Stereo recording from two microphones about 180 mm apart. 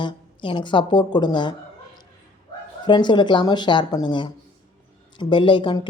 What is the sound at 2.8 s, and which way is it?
A woman's voice, 25° left (ahead or behind).